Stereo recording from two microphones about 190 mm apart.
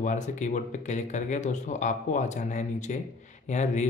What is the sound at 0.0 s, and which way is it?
Speech, 40° left (ahead or behind).